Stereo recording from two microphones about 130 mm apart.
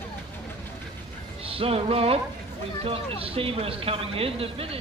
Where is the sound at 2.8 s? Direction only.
45° right (ahead or behind).